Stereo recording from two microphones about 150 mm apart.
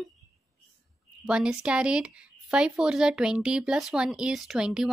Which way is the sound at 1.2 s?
5° right (ahead or behind).